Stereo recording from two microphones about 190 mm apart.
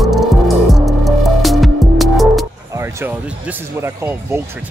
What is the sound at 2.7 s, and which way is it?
Speech, 15° right (ahead or behind).